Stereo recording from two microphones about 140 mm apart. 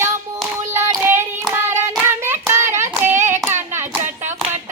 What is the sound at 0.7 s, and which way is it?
Child singing, 20° right (ahead or behind).